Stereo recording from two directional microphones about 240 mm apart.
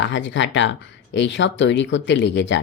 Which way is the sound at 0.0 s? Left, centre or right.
Left.